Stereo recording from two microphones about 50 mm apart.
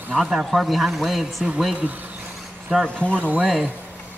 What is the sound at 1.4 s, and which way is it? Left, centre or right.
Speech, centre.